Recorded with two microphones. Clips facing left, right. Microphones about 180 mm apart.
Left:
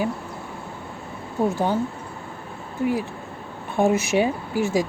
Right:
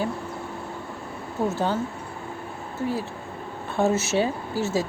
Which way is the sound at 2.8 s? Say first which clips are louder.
Left 4 dB; 10° left (ahead or behind).